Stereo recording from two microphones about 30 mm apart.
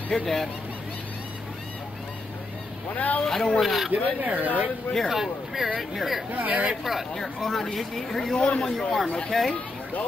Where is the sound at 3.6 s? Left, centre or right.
Centre.